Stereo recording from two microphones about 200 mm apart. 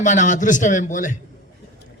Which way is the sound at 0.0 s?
40° left (ahead or behind).